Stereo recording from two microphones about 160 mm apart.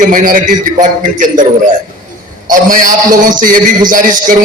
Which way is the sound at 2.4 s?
55° right (ahead or behind).